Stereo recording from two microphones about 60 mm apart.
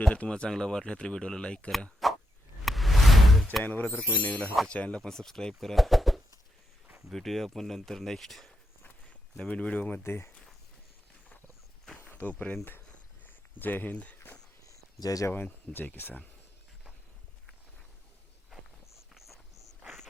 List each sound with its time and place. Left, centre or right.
0.1 s speech: centre
2.0 s frog: centre
2.6 s a sound: centre
3.6 s speech: left
5.0 s speech: centre
9.4 s speech: left
10.0 s speech: left
12.2 s speech: left
13.2 s a sound: left
15.0 s speech: left
15.3 s speech: left
19.1 s a sound: centre